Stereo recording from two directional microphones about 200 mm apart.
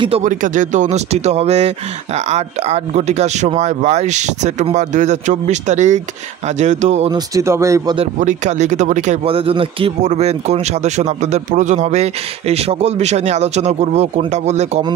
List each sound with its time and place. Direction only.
0.2 s speech: 40° right (ahead or behind)
7.1 s speech: 20° right (ahead or behind)
8.2 s speech: 35° right (ahead or behind)